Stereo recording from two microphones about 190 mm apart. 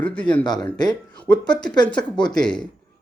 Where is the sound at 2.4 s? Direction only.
5° left (ahead or behind).